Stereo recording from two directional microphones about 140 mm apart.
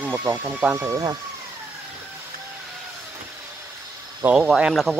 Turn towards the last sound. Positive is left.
turn(degrees=-5)  # may be behind; listen again after turning